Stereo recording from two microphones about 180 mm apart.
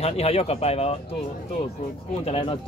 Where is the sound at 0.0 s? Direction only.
35° left (ahead or behind).